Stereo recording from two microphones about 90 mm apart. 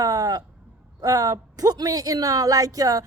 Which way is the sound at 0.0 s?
40° right (ahead or behind).